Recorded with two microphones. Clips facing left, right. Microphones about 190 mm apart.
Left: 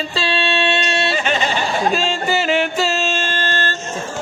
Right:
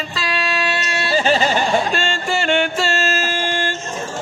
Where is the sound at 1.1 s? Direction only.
35° right (ahead or behind).